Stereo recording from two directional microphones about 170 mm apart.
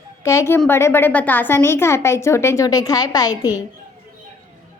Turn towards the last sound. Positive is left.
turn(degrees=20)  # may be behind; listen again after turning